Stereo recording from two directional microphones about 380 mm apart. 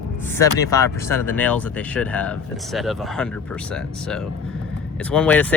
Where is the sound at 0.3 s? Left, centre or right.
Centre.